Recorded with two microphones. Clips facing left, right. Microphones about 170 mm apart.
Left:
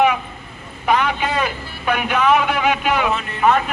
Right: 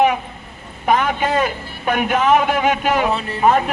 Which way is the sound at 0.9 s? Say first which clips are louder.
Right 1 dB; 45° right (ahead or behind).